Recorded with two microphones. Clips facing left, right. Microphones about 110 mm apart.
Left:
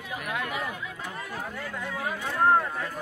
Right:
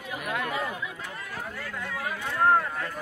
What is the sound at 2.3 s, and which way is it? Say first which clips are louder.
Speech: even; 15° left (ahead or behind).